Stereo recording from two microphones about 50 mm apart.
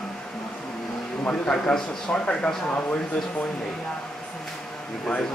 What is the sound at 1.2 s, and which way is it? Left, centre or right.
A man's voice, centre.